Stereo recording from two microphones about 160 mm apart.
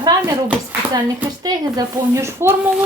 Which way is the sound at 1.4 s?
25° right (ahead or behind).